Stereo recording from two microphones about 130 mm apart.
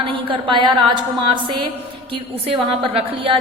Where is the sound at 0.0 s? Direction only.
40° right (ahead or behind).